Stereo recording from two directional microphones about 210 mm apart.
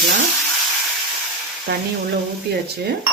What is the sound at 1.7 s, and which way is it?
Speech, 50° right (ahead or behind).